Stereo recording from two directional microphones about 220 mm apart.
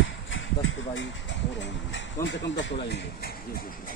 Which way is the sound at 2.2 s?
55° left (ahead or behind).